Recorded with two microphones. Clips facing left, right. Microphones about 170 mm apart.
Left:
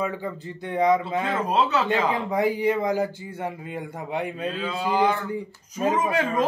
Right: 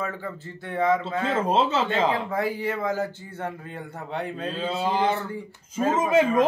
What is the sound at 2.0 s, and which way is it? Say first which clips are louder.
Speech: left 2 dB; 20° left (ahead or behind).